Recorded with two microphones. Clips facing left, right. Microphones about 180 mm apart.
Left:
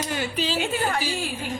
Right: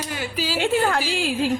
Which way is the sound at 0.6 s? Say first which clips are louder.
Right 5 dB; 80° right.